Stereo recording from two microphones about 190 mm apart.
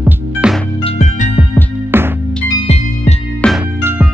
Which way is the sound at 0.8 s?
35° left (ahead or behind).